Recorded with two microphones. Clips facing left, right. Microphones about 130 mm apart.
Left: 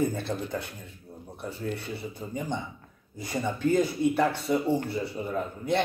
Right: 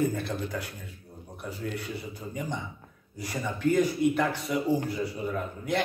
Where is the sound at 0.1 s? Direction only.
25° left (ahead or behind).